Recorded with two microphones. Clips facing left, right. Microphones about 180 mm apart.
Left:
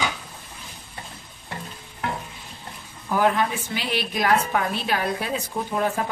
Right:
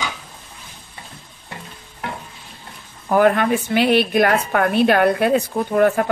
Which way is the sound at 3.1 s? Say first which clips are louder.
Right 6 dB; 60° right (ahead or behind).